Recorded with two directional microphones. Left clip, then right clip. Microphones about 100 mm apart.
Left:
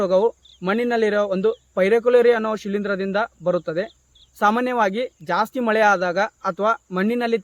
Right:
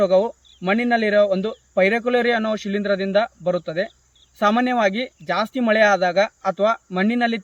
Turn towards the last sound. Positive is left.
turn(degrees=50)  # may be behind; listen again after turning